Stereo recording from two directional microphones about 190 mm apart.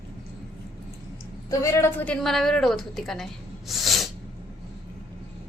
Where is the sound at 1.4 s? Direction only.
15° left (ahead or behind).